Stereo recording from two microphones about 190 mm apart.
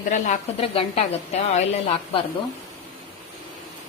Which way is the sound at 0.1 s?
35° left (ahead or behind).